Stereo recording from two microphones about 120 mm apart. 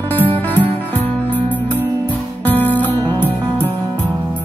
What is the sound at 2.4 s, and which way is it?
Music, 15° left (ahead or behind).